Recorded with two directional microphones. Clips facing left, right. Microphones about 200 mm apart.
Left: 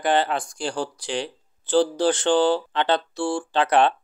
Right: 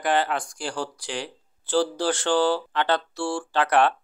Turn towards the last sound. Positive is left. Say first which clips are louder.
# left 2 dB
turn(degrees=20)  # may be behind; listen again after turning